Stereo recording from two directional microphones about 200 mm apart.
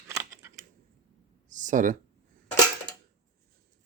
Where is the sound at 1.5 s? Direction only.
40° right (ahead or behind).